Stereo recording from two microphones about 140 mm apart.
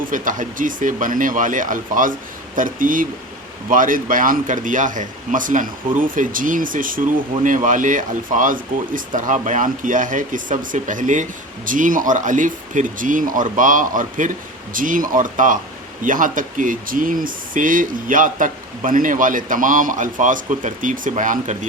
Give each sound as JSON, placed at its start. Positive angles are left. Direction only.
{"t": 0.1, "sound": "speech", "side_deg": -70}